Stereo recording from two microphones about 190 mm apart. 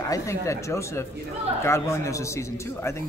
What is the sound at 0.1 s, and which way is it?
A man's voice, 15° left (ahead or behind).